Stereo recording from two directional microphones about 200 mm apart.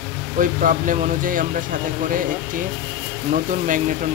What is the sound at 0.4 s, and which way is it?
Speech, 40° right (ahead or behind).